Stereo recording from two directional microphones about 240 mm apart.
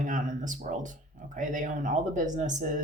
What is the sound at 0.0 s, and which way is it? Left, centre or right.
Speech, right.